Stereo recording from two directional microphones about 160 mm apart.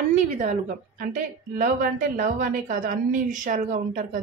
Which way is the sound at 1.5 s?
65° right (ahead or behind).